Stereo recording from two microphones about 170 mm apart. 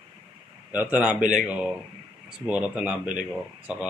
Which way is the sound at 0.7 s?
10° right (ahead or behind).